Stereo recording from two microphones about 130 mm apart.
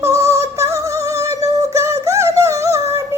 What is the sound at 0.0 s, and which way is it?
Music, 25° right (ahead or behind).